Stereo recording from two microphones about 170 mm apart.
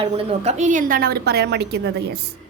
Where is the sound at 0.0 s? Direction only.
35° right (ahead or behind); by 2.1 s 75° right (ahead or behind).